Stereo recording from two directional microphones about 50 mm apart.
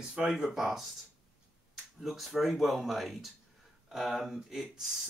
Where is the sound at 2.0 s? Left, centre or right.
Centre.